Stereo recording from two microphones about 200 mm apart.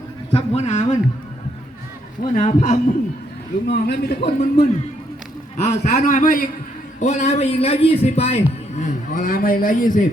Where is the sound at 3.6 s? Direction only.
55° left (ahead or behind).